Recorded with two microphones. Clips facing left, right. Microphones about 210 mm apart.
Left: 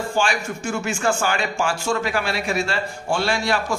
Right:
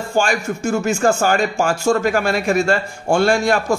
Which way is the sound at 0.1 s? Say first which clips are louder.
Right 7 dB; 45° right (ahead or behind).